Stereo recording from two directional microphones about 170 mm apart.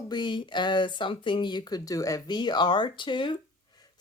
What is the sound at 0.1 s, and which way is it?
Speech, 25° left (ahead or behind).